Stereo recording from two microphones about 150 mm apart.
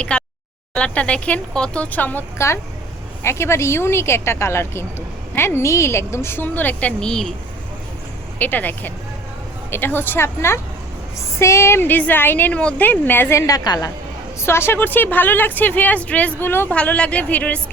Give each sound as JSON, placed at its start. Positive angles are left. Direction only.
{"t": 0.0, "sound": "a sound", "side_deg": 5}
{"t": 0.7, "sound": "speech", "side_deg": 10}
{"t": 8.4, "sound": "speech", "side_deg": 10}